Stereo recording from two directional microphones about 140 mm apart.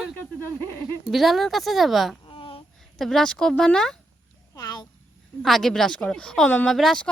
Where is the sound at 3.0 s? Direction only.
Centre (ahead or behind).